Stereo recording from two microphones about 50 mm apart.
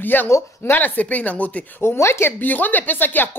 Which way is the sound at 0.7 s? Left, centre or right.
Left.